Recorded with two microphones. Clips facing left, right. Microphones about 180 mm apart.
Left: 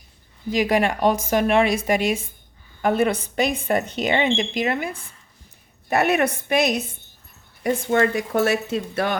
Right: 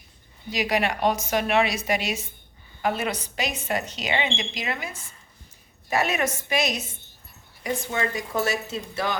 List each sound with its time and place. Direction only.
0.5 s speech: 50° left (ahead or behind)